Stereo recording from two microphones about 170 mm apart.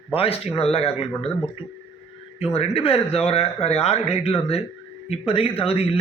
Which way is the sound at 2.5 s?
35° left (ahead or behind).